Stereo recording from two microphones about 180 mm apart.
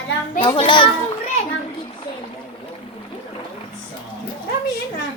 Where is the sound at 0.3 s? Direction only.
30° left (ahead or behind).